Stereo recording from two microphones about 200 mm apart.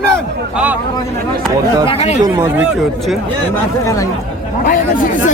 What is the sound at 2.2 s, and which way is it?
Speech, 10° right (ahead or behind).